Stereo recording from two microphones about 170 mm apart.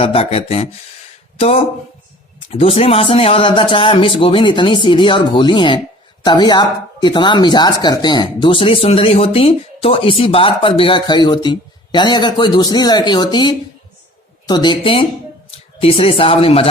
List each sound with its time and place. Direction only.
0.0 s speech: 35° left (ahead or behind)